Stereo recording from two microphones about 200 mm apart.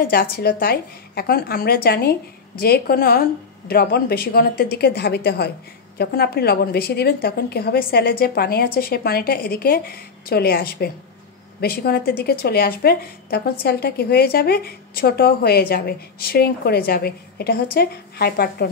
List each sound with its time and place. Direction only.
0.0 s speech: 50° left (ahead or behind)